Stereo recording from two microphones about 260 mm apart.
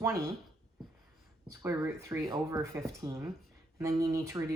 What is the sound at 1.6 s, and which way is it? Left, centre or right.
Speech, centre.